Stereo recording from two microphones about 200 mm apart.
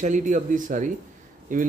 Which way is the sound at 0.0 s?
40° right (ahead or behind).